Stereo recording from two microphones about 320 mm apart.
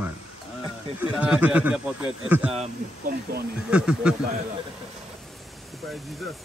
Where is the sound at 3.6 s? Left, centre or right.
Centre.